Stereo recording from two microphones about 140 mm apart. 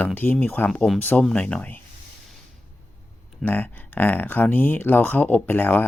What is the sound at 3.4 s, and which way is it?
Speech, 15° left (ahead or behind).